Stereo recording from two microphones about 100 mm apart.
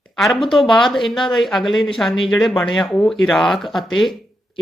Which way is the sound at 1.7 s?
55° left (ahead or behind).